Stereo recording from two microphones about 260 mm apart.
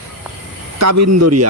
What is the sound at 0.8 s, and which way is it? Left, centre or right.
Speech, right.